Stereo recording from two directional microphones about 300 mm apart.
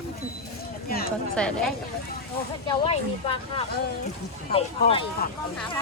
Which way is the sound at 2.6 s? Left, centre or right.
Centre.